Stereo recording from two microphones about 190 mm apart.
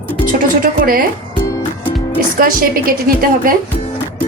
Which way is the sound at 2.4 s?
50° right (ahead or behind).